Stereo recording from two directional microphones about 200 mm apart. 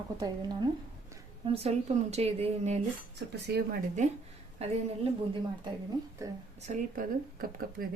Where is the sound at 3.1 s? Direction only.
55° right (ahead or behind).